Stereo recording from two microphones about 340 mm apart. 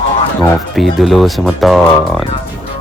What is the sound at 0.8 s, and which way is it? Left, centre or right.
Speech, centre.